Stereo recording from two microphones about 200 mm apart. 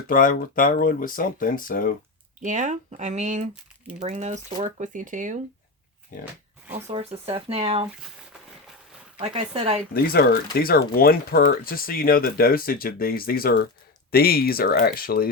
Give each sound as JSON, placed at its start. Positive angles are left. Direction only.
{"t": 0.1, "sound": "speech", "side_deg": 45}
{"t": 2.4, "sound": "speech", "side_deg": -40}
{"t": 6.8, "sound": "speech", "side_deg": -30}
{"t": 9.1, "sound": "speech", "side_deg": -25}
{"t": 9.9, "sound": "speech", "side_deg": 50}